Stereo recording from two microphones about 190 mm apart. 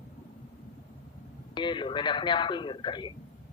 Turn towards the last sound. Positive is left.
turn(degrees=25)  # may be behind; listen again after turning